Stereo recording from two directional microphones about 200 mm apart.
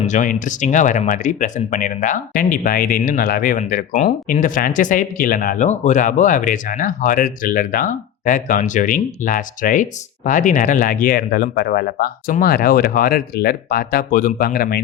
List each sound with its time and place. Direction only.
0.0 s speech: 35° left (ahead or behind)